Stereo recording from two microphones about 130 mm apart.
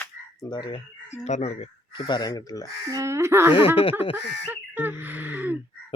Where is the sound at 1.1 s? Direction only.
60° left (ahead or behind).